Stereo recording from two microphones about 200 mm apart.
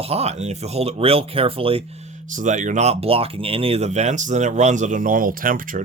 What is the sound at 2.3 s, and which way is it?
Speech, 40° right (ahead or behind).